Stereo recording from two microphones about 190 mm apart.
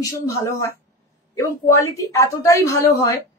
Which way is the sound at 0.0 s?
15° left (ahead or behind).